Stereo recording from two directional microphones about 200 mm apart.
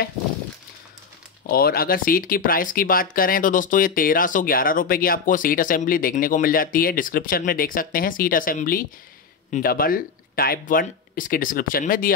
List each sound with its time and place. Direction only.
1.5 s speech: 50° left (ahead or behind)